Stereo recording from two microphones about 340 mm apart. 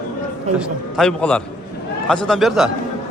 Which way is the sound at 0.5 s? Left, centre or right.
Centre.